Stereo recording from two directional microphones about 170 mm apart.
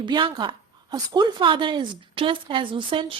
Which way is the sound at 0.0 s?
25° right (ahead or behind).